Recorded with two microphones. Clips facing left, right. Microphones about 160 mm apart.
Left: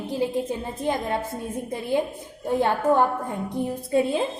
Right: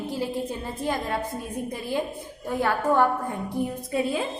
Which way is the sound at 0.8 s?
20° left (ahead or behind).